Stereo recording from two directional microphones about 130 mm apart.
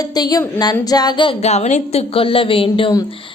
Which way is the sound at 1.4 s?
60° left (ahead or behind).